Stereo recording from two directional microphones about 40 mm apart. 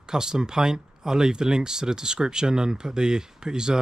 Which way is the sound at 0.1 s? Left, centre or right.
Centre.